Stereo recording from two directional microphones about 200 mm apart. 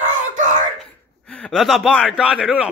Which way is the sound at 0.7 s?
5° left (ahead or behind).